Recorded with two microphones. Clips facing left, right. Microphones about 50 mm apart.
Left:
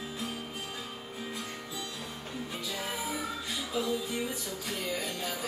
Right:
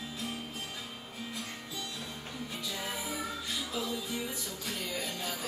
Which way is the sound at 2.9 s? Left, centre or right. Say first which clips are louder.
Left 2 dB; left.